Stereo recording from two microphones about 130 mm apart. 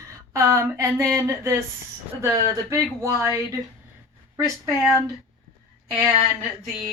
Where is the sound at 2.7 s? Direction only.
25° right (ahead or behind).